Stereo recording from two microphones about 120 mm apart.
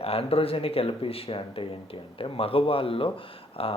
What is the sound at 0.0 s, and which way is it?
Speech, 55° left (ahead or behind).